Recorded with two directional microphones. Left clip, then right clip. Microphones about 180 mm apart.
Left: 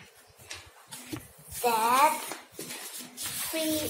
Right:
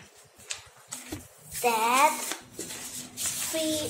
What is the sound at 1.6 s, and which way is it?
Speech, 15° right (ahead or behind).